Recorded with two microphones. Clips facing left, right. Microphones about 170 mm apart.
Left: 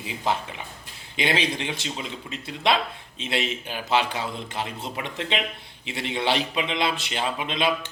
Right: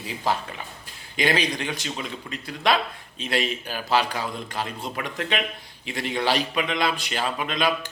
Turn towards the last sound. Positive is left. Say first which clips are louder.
# even
turn(degrees=25)  # may be behind; listen again after turning